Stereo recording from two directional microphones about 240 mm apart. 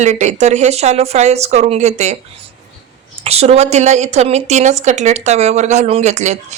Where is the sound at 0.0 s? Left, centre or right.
Right.